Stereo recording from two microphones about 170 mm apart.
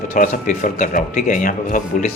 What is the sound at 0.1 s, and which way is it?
A man's voice, 50° left (ahead or behind).